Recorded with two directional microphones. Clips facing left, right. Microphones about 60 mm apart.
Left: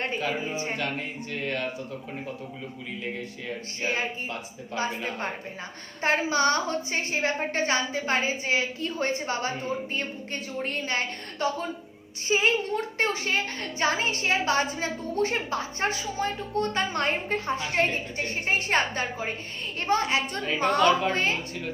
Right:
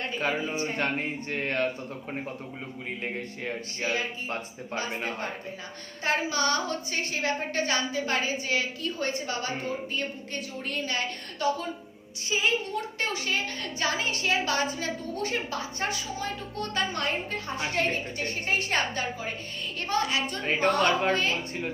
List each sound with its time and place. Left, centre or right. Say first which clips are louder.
0.8 s speech: right 2 dB; right
3.0 s speech: even; right
4.9 s speech: even; right
6.0 s a woman's voice: left 3 dB; left
10.6 s a woman's voice: left 2 dB; left
20.4 s speech: left 1 dB; right
21.1 s a woman's voice: even; left